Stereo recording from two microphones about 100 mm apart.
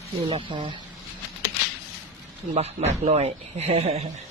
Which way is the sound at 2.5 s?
90° right.